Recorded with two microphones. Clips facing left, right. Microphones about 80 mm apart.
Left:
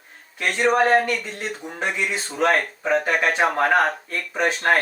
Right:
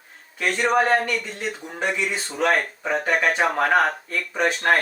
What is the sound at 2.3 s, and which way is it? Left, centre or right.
Speech, centre.